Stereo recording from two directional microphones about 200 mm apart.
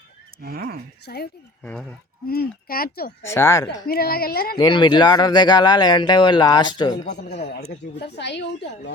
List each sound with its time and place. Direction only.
0.4 s speech: 50° right (ahead or behind)
1.0 s speech: 55° left (ahead or behind)
1.6 s speech: 5° left (ahead or behind)
2.2 s speech: 50° left (ahead or behind)
3.2 s speech: 15° left (ahead or behind)
3.8 s speech: 50° left (ahead or behind)
4.5 s speech: 20° left (ahead or behind)
7.1 s a woman's voice: 55° left (ahead or behind)